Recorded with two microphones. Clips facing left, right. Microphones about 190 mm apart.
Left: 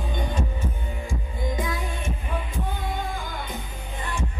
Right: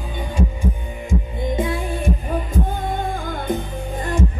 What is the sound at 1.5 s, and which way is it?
Music, 30° right (ahead or behind).